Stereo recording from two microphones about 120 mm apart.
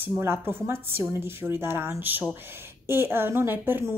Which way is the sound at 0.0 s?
20° right (ahead or behind).